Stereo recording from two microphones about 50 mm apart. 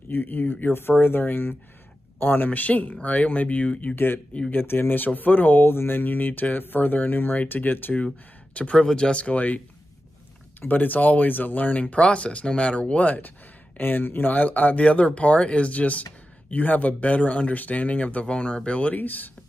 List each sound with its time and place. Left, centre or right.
0.1 s speech: left
3.9 s speech: left
8.7 s speech: centre
10.7 s speech: left
18.2 s speech: centre
18.9 s speech: left